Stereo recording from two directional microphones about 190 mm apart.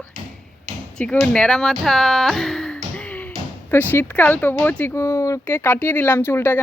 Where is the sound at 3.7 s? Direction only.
10° left (ahead or behind).